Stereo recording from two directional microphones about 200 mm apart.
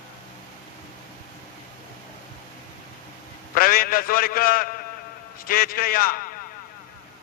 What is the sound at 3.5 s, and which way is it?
A man's voice, 45° left (ahead or behind).